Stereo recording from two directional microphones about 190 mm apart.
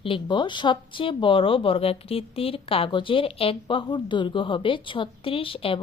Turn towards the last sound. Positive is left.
turn(degrees=30)  # may be behind; listen again after turning